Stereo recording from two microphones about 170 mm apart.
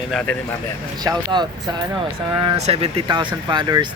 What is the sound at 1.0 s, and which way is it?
Speech, 25° right (ahead or behind).